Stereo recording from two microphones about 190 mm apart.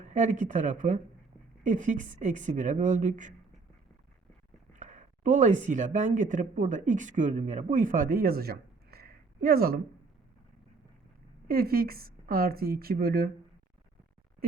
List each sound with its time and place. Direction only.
0.0 s a woman's voice: 40° right (ahead or behind)
4.7 s speech: 40° right (ahead or behind)
11.4 s speech: 50° right (ahead or behind)